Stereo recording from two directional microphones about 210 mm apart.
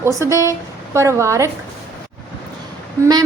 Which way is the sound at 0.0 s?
15° right (ahead or behind).